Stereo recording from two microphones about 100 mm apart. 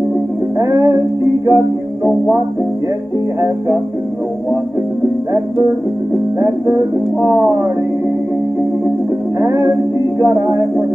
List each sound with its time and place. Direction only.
0.6 s music: 40° right (ahead or behind)
3.3 s music: 35° right (ahead or behind)
6.4 s music: 30° right (ahead or behind)
9.4 s music: 35° right (ahead or behind)